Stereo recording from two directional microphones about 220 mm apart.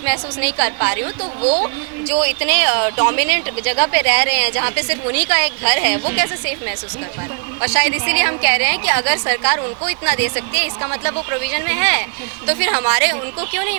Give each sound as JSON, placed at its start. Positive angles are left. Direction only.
{"t": 0.0, "sound": "speech", "side_deg": -10}
{"t": 1.0, "sound": "speech", "side_deg": -30}
{"t": 2.2, "sound": "speech", "side_deg": -10}
{"t": 7.6, "sound": "speech", "side_deg": -10}